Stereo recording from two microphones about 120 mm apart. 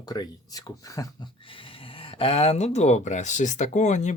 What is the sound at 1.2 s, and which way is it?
Speech, 45° left (ahead or behind).